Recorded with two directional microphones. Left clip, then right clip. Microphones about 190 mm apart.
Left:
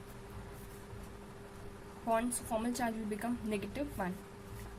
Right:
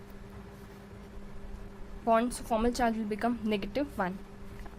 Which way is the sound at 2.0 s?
40° right (ahead or behind).